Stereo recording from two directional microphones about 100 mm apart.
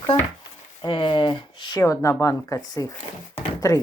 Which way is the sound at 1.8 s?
35° left (ahead or behind).